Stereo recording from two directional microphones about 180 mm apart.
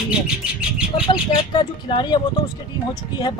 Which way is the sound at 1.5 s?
25° left (ahead or behind).